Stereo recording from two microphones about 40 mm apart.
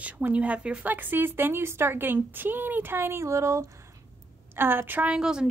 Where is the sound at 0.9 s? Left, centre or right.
Right.